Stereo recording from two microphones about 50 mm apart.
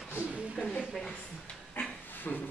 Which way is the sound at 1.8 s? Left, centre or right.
Left.